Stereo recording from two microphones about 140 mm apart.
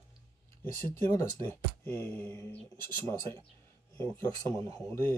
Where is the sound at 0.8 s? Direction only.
15° left (ahead or behind).